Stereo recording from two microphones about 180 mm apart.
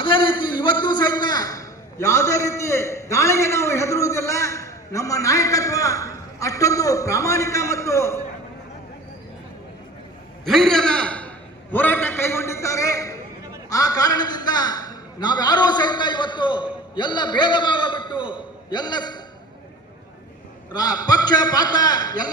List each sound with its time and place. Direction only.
0.0 s a man's voice: 25° left (ahead or behind)
10.4 s a sound: centre (ahead or behind); by 19.2 s 25° left (ahead or behind)
20.7 s a man's voice: 20° left (ahead or behind)